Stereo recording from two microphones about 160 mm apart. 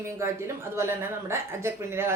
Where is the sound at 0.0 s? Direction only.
15° right (ahead or behind).